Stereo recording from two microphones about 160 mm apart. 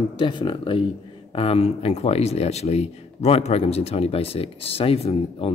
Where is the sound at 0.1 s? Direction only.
30° left (ahead or behind).